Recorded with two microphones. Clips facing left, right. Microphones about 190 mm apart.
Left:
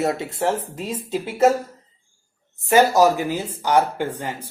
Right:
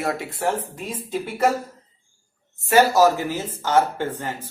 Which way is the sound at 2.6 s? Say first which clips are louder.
Left 1 dB; 15° left (ahead or behind).